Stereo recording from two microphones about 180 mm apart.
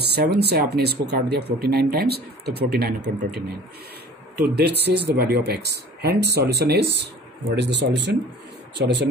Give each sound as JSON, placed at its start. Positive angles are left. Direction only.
{"t": 0.0, "sound": "speech", "side_deg": -65}